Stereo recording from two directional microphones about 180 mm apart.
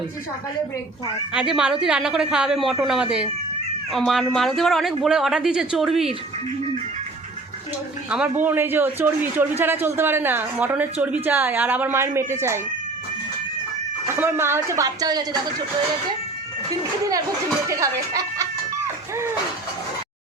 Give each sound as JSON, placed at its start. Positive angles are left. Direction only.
{"t": 1.3, "sound": "speech", "side_deg": -5}
{"t": 8.1, "sound": "a man's voice", "side_deg": -10}
{"t": 14.2, "sound": "a man's voice", "side_deg": -15}
{"t": 17.7, "sound": "a man's voice", "side_deg": -20}